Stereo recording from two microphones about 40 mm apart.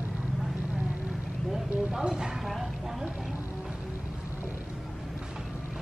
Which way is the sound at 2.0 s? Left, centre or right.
Centre.